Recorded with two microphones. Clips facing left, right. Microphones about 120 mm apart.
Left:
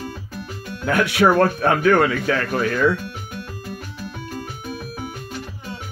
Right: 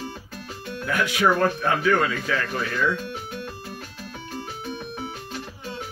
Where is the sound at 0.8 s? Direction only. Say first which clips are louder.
Left 5 dB; 60° left (ahead or behind).